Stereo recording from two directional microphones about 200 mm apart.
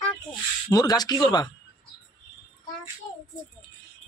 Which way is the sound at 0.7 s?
20° left (ahead or behind).